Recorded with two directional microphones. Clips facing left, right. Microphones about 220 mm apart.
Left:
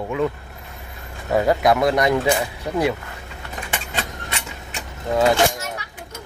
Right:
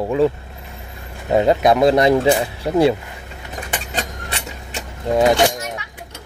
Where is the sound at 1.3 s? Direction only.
20° right (ahead or behind).